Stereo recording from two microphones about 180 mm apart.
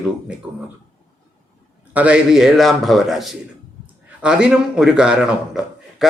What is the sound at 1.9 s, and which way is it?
A man's voice, 5° right (ahead or behind).